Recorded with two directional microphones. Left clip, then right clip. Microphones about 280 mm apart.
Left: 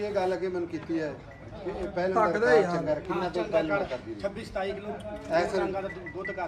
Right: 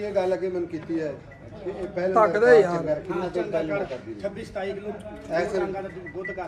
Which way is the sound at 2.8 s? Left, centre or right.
Centre.